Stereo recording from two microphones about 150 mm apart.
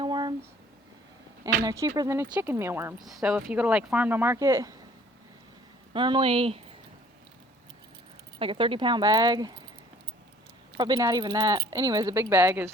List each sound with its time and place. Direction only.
0.0 s a sound: 30° right (ahead or behind)
1.6 s speech: 20° right (ahead or behind)
3.0 s speech: centre (ahead or behind); by 4.8 s 20° right (ahead or behind)
5.9 s speech: 35° right (ahead or behind)
8.4 s speech: 35° right (ahead or behind)
10.8 s speech: 30° right (ahead or behind)